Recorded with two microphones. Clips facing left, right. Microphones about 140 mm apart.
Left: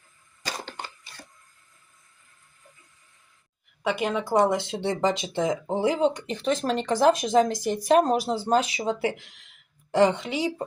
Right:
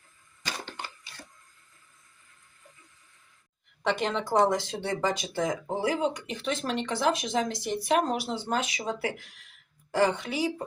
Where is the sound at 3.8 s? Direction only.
5° left (ahead or behind).